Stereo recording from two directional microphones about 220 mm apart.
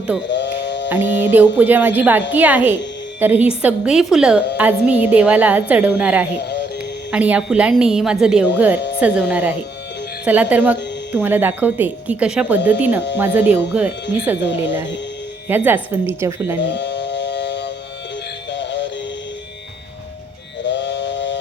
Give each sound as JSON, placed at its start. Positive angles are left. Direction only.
{"t": 0.3, "sound": "music", "side_deg": 55}
{"t": 1.0, "sound": "mantra", "side_deg": 55}
{"t": 1.3, "sound": "a woman's voice", "side_deg": -5}
{"t": 6.4, "sound": "music", "side_deg": 50}
{"t": 7.1, "sound": "a woman's voice", "side_deg": -5}
{"t": 14.4, "sound": "speech", "side_deg": 55}
{"t": 15.4, "sound": "speech", "side_deg": -10}
{"t": 16.6, "sound": "music", "side_deg": 50}
{"t": 18.5, "sound": "synthetic singing", "side_deg": 55}
{"t": 20.7, "sound": "a sound", "side_deg": 55}